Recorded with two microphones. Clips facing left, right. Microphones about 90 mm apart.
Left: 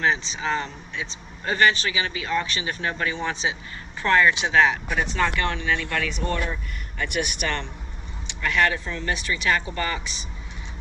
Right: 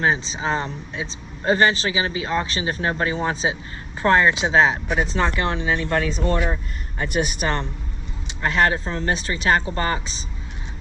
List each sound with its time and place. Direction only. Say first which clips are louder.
0.0 s speech: right 2 dB; 30° right (ahead or behind)